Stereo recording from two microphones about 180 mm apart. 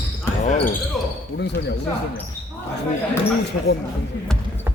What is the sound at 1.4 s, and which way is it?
Speech, 70° left (ahead or behind).